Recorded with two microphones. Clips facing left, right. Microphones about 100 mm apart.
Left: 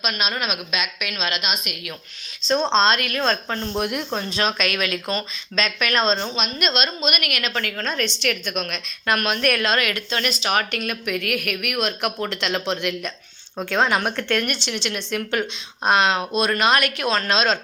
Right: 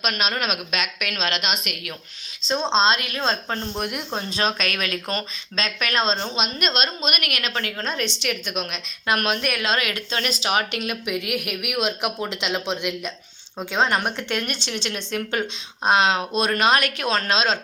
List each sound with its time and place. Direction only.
0.0 s a woman's voice: 60° right (ahead or behind)
2.5 s speech: centre (ahead or behind)
2.8 s a woman's voice: 30° right (ahead or behind)
3.8 s speech: centre (ahead or behind)
4.4 s speech: 40° right (ahead or behind)
6.6 s a woman's voice: 40° right (ahead or behind); by 9.1 s 20° right (ahead or behind)
9.4 s speech: 5° right (ahead or behind)
9.6 s a woman's voice: 25° right (ahead or behind)
10.5 s speech: 20° right (ahead or behind)
13.7 s speech: 5° left (ahead or behind)
14.2 s a woman's voice: 25° right (ahead or behind)